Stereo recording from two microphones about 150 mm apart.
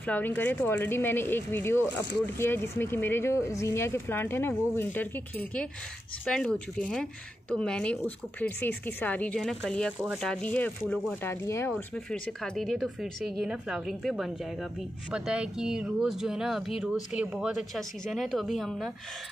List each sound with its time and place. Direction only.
0.0 s speech: 10° left (ahead or behind)
11.4 s speech: 15° left (ahead or behind)
11.7 s speech: 5° left (ahead or behind)